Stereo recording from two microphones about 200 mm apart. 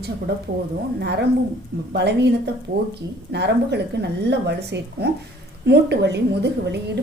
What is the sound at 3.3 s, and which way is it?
A woman's voice, 60° right (ahead or behind).